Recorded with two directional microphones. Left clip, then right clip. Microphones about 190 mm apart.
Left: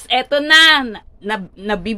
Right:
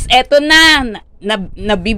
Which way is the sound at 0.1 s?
30° right (ahead or behind).